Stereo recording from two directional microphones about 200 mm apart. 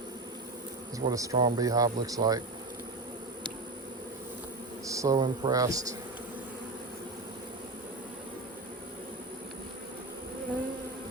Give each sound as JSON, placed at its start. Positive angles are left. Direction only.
{"t": 0.9, "sound": "speech", "side_deg": -15}
{"t": 4.9, "sound": "speech", "side_deg": -15}